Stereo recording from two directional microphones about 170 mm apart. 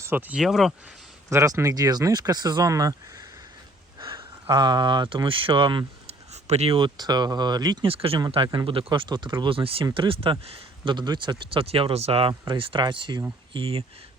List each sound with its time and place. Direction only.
0.0 s speech: 10° right (ahead or behind)
1.3 s speech: 15° right (ahead or behind)